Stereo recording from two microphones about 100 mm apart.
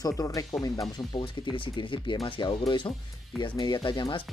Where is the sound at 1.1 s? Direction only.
50° left (ahead or behind).